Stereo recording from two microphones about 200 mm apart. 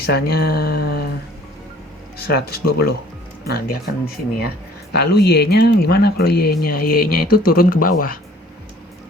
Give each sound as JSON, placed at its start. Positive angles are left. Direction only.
{"t": 0.0, "sound": "speech", "side_deg": 50}
{"t": 2.1, "sound": "speech", "side_deg": 50}